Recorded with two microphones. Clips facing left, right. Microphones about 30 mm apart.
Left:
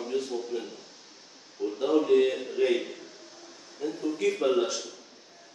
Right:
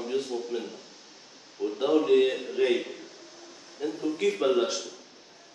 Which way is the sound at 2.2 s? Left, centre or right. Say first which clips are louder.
Right 1 dB; centre.